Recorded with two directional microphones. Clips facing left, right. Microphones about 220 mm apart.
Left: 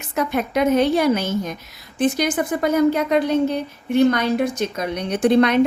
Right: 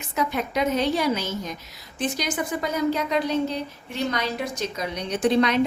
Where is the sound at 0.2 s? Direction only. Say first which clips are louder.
Left 5 dB; 55° left (ahead or behind).